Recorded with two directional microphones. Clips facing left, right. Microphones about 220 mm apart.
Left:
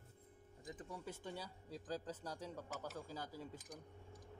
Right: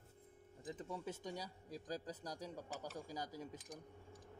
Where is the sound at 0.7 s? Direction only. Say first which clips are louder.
Right 4 dB; 25° right (ahead or behind).